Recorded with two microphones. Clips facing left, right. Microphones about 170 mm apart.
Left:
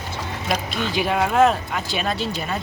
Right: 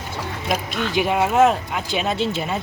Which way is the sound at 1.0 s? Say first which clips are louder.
Right 1 dB; 5° right (ahead or behind).